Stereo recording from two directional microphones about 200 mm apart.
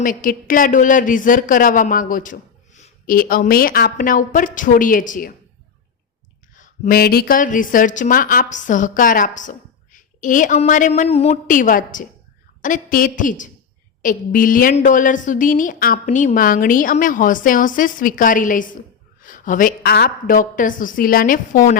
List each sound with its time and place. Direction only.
0.0 s speech: 40° left (ahead or behind)
6.6 s a woman's voice: 45° left (ahead or behind)